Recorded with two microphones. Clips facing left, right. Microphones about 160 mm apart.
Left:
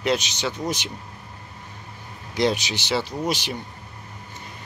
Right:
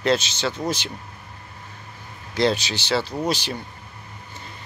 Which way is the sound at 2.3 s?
15° left (ahead or behind).